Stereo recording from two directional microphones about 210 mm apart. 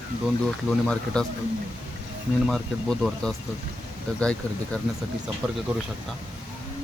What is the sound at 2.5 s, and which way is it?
Speech, centre (ahead or behind).